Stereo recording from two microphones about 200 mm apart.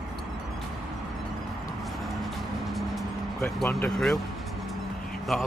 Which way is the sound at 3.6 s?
Centre (ahead or behind).